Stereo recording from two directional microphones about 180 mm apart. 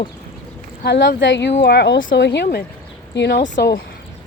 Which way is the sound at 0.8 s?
75° left (ahead or behind).